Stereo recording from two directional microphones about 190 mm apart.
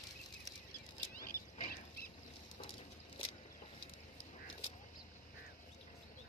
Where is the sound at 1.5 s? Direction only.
45° left (ahead or behind).